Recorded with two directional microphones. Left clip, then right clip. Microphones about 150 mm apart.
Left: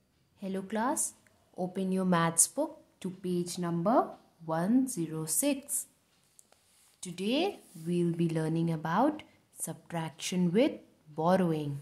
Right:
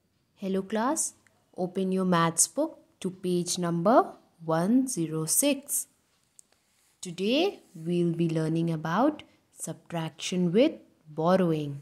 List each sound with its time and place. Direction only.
0.4 s a woman's voice: 30° right (ahead or behind)
3.2 s speech: 50° right (ahead or behind)
4.5 s speech: 40° right (ahead or behind)
7.0 s speech: 30° right (ahead or behind)